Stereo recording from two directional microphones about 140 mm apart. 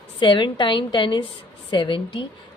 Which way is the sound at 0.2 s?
35° left (ahead or behind).